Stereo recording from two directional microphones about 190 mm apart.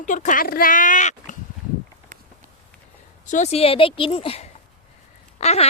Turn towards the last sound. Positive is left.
turn(degrees=35)  # may be behind; listen again after turning